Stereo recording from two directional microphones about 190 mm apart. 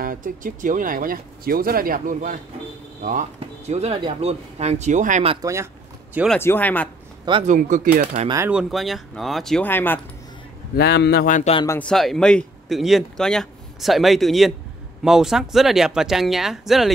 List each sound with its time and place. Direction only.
0.0 s speech: 45° right (ahead or behind)
5.3 s speech: 15° right (ahead or behind)
6.3 s speech: 10° left (ahead or behind)
7.4 s speech: 40° right (ahead or behind)
8.5 s speech: centre (ahead or behind)
10.8 s a man's voice: 65° left (ahead or behind); by 11.5 s 45° left (ahead or behind)
11.6 s speech: 15° left (ahead or behind)
11.9 s speech: centre (ahead or behind)